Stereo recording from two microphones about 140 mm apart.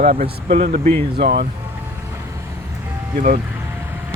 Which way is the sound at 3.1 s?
90° right.